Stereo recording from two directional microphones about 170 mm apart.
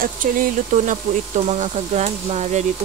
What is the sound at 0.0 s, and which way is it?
Speech, 55° right (ahead or behind).